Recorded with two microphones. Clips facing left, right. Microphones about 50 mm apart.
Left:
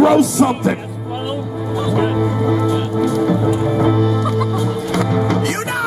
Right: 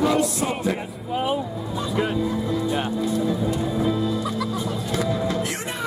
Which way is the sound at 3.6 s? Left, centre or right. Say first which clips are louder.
Left 7 dB; left.